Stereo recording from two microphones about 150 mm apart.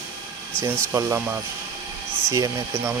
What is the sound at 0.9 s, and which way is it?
Speech, 20° right (ahead or behind).